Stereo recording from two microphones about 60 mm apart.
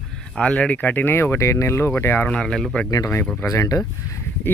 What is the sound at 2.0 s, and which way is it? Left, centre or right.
Speech, left.